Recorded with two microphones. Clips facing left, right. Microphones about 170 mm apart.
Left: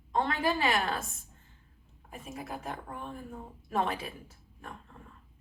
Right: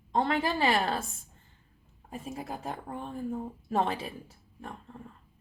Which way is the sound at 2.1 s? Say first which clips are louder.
Right 3 dB; 30° right (ahead or behind).